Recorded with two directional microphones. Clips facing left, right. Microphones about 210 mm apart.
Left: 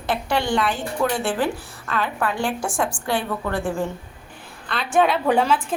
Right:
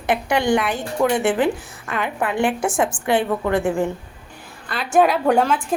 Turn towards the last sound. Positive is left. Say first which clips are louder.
# right 2 dB
turn(degrees=0)  # may be behind; listen again after turning